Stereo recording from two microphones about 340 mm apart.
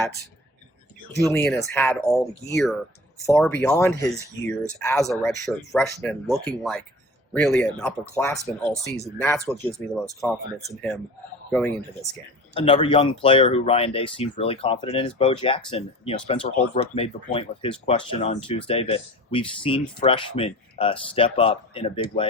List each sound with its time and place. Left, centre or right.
1.3 s speech: centre
12.5 s speech: centre